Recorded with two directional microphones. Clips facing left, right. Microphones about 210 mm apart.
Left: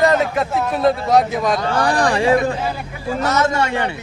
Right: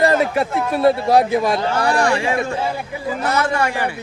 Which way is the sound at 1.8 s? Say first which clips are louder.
Left 3 dB; 35° left (ahead or behind).